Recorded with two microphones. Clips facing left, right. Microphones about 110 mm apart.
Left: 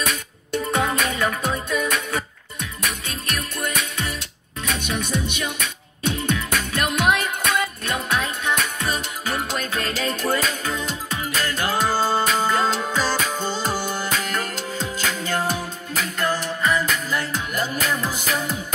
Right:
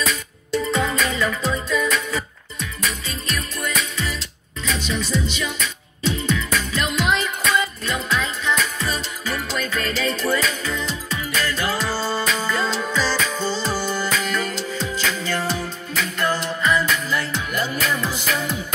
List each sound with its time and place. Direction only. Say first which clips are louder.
0.1 s music: right 2 dB; 55° left (ahead or behind)